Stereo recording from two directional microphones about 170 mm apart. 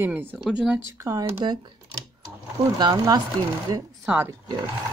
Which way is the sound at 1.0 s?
15° right (ahead or behind).